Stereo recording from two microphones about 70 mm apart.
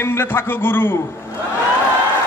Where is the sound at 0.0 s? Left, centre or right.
Left.